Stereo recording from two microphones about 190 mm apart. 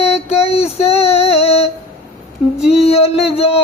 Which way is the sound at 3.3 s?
30° left (ahead or behind).